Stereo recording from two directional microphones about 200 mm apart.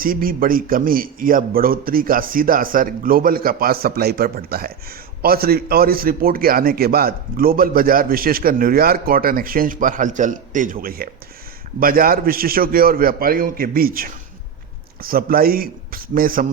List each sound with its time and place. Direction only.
0.0 s a man's voice: 45° right (ahead or behind)